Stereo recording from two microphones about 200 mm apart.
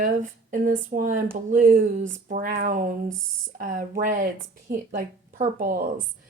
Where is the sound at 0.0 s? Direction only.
40° right (ahead or behind).